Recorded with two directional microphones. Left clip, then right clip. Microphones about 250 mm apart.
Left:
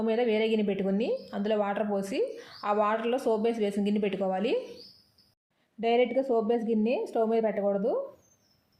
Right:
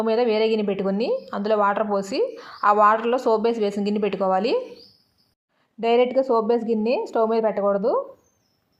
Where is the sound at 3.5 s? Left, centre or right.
Right.